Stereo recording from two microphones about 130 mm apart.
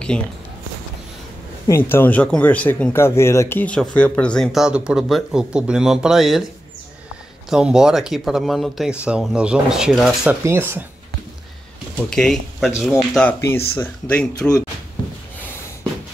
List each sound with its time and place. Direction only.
0.1 s speech: 5° left (ahead or behind)
1.7 s speech: 20° left (ahead or behind)
4.5 s speech: 5° right (ahead or behind)
7.4 s speech: 5° right (ahead or behind)
10.4 s speech: 20° right (ahead or behind)
12.1 s speech: 5° left (ahead or behind)